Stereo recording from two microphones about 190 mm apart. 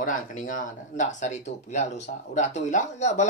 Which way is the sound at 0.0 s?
45° left (ahead or behind).